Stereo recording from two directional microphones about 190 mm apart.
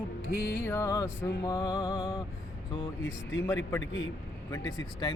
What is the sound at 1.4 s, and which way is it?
Music, 20° left (ahead or behind).